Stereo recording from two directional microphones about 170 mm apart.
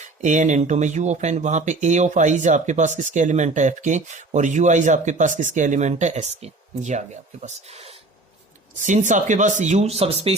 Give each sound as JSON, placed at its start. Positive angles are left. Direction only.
{"t": 0.0, "sound": "speech", "side_deg": -45}